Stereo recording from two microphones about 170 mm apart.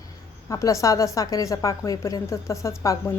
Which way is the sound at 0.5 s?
20° left (ahead or behind).